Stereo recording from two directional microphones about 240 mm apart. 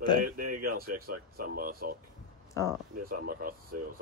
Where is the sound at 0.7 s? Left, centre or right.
Right.